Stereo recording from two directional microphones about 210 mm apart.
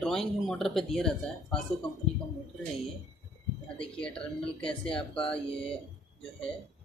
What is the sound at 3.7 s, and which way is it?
Speech, 5° left (ahead or behind).